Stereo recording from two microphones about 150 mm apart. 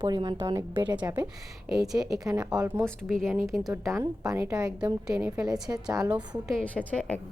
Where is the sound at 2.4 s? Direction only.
10° right (ahead or behind).